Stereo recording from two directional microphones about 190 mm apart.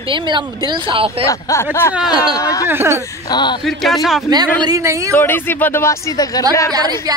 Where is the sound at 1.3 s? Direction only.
15° left (ahead or behind).